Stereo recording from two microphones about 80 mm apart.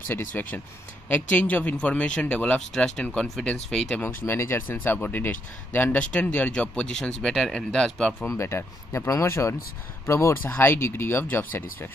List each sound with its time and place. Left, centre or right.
0.1 s speech: left
2.7 s speech: centre
4.0 s speech: left
7.2 s speech: centre
8.3 s speech: left
10.4 s speech: left